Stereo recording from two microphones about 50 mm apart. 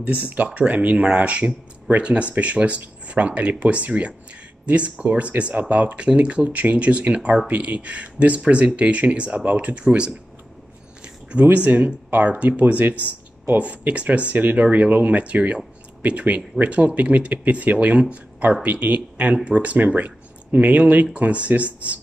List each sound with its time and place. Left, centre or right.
0.6 s speech: right
11.5 s speech: right